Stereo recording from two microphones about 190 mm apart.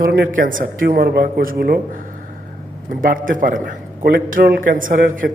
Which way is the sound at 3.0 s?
45° right (ahead or behind).